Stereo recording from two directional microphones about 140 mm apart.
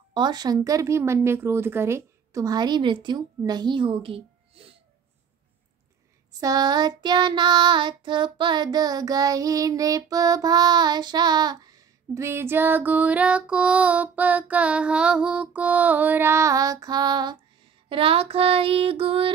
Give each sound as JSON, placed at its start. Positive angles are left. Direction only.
{"t": 0.1, "sound": "child singing", "side_deg": -30}
{"t": 6.4, "sound": "child singing", "side_deg": -30}
{"t": 17.8, "sound": "child singing", "side_deg": -40}